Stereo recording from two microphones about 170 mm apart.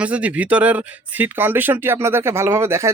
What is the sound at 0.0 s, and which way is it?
Speech, 10° right (ahead or behind).